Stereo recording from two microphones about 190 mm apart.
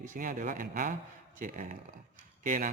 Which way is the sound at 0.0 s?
45° right (ahead or behind).